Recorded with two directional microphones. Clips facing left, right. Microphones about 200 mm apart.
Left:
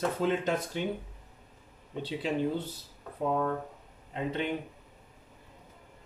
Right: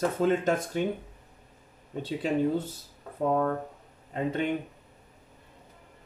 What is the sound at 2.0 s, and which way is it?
Speech, 45° right (ahead or behind).